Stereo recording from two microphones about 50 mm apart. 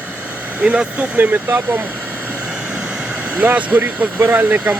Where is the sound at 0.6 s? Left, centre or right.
Right.